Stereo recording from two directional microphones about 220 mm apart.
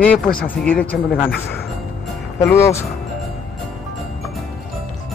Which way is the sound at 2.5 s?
10° left (ahead or behind).